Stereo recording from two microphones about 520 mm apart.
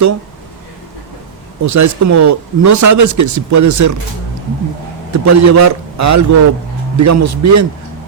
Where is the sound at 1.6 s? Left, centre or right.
Right.